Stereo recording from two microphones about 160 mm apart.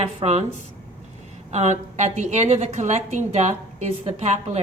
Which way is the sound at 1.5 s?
45° right (ahead or behind).